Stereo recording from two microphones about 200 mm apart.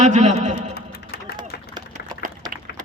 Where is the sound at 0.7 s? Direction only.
50° left (ahead or behind).